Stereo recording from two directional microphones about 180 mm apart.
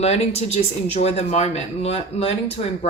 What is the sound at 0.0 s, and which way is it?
Speech, 35° left (ahead or behind).